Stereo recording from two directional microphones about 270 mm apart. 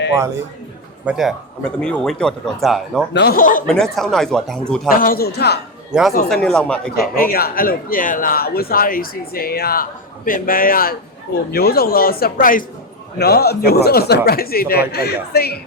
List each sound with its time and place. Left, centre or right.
1.0 s speech: centre
3.1 s speech: left
3.9 s speech: centre
4.9 s speech: left
5.9 s speech: centre
6.9 s speech: left